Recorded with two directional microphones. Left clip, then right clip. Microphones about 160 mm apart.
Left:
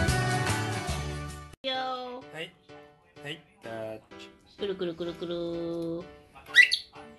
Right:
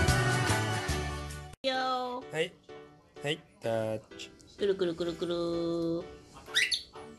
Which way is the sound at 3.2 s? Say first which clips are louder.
Right 7 dB; 60° right (ahead or behind).